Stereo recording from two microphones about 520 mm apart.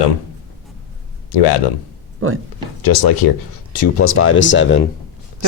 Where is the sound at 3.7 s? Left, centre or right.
Left.